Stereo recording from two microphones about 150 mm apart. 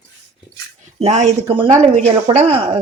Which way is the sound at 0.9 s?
45° right (ahead or behind).